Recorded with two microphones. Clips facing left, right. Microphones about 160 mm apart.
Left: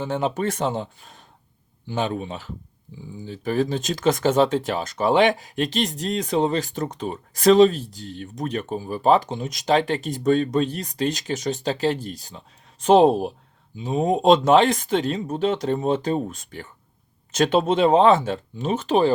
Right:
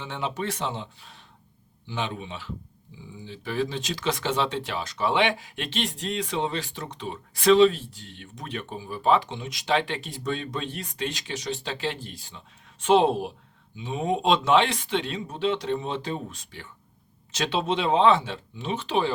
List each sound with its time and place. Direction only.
0.0 s speech: 45° left (ahead or behind)